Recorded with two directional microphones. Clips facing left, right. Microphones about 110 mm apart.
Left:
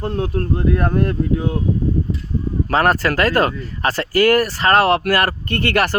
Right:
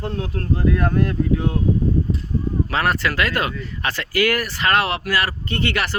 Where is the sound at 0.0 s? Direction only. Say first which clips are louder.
Left 5 dB; 40° left (ahead or behind).